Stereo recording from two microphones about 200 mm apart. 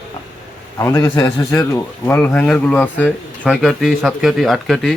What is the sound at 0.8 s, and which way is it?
A man's voice, 15° left (ahead or behind).